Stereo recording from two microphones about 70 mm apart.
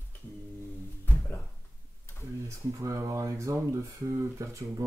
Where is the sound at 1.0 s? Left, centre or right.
Left.